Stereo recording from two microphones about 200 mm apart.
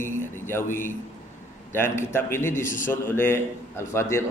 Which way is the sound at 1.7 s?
10° left (ahead or behind).